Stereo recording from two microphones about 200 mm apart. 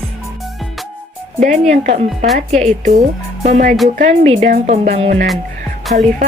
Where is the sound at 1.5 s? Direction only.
35° right (ahead or behind).